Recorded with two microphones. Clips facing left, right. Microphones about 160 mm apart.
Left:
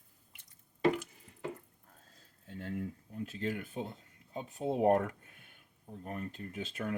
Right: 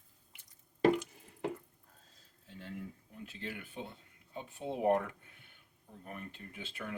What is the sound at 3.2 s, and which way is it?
Speech, 40° left (ahead or behind).